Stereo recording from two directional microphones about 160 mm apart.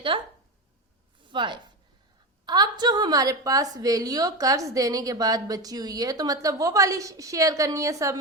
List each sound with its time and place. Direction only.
0.1 s speech: 35° right (ahead or behind)
1.3 s a woman's voice: 30° right (ahead or behind)